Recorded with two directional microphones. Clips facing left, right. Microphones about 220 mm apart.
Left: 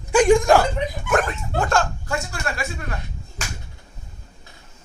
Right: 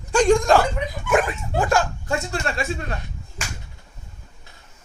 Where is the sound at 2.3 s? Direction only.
25° right (ahead or behind).